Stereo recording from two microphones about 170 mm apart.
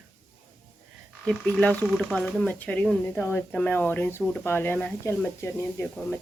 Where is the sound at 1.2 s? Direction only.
5° left (ahead or behind).